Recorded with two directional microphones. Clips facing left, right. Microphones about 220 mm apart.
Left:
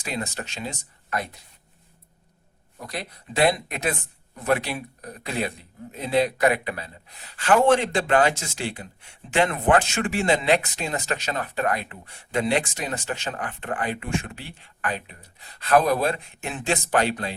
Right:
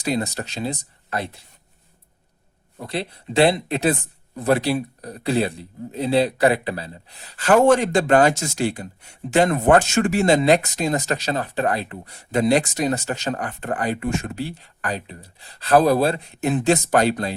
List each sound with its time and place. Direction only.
0.0 s speech: 35° right (ahead or behind)
2.7 s speech: 30° right (ahead or behind)